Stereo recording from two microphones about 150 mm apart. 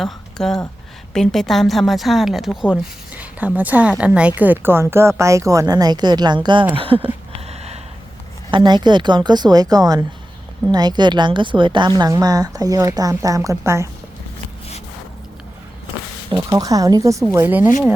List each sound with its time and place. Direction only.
0.0 s speech: 5° left (ahead or behind); by 6.7 s 30° right (ahead or behind)
6.7 s a sound: 40° right (ahead or behind)
8.4 s a woman's voice: 30° right (ahead or behind)
16.3 s a woman's voice: 25° right (ahead or behind)